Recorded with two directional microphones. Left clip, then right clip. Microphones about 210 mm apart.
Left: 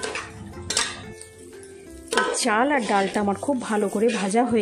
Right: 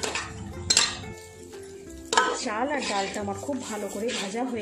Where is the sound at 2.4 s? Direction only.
50° left (ahead or behind).